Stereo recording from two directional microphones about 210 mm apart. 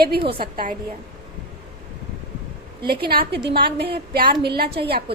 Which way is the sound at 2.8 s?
50° right (ahead or behind).